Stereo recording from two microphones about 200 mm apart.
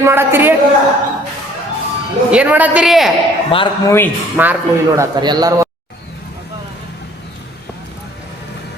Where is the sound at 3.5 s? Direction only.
25° left (ahead or behind).